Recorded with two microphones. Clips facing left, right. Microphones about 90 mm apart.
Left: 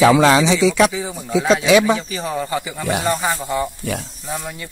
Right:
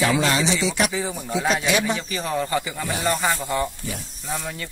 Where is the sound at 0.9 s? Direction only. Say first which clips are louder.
Left 1 dB; centre (ahead or behind).